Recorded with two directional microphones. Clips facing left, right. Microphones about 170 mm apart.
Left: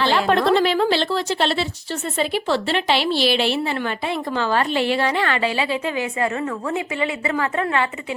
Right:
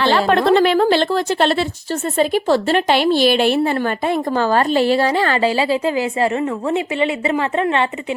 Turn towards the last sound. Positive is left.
turn(degrees=-25)  # may be behind; listen again after turning